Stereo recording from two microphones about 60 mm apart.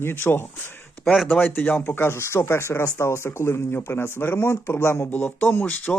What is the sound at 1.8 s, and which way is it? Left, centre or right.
Speech, left.